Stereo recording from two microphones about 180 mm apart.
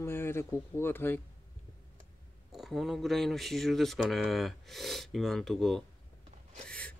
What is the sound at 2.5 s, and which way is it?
Speech, centre (ahead or behind).